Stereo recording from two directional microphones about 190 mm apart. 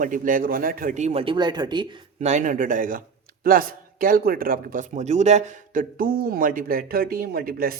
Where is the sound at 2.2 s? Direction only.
40° right (ahead or behind).